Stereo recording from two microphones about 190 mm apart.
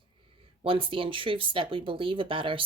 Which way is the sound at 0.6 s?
30° right (ahead or behind).